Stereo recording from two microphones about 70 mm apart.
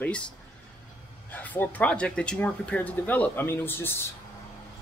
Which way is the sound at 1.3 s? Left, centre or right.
Left.